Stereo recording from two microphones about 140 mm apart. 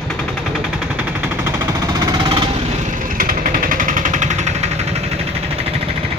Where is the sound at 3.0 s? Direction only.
75° right (ahead or behind); by 5.0 s 50° right (ahead or behind).